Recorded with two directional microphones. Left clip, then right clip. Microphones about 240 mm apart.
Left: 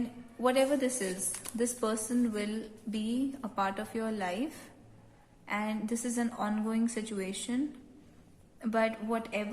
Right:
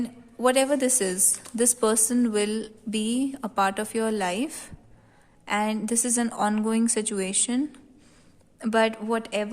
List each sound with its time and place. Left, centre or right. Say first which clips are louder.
0.0 s a woman's voice: right 7 dB; right
5.5 s a woman's voice: right 8 dB; right
8.6 s a woman's voice: right 7 dB; right